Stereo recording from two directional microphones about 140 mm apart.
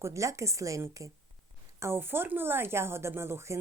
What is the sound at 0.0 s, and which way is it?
Speech, 20° right (ahead or behind).